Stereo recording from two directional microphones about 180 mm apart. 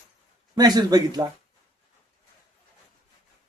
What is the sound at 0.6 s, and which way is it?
Speech, 20° right (ahead or behind).